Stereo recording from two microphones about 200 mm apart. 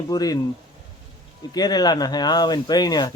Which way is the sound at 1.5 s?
20° left (ahead or behind).